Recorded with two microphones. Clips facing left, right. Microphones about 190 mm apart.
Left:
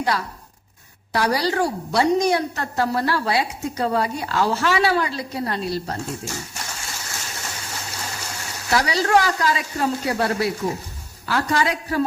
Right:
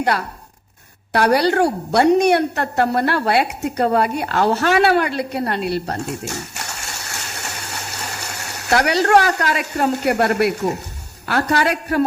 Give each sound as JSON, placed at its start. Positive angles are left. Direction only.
{"t": 0.0, "sound": "a man's voice", "side_deg": -60}